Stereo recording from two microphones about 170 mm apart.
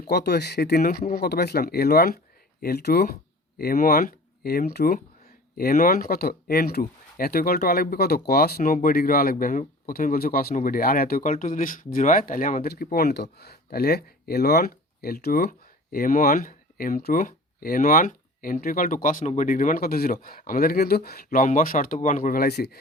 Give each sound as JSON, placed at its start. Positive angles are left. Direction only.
{"t": 0.1, "sound": "speech", "side_deg": 75}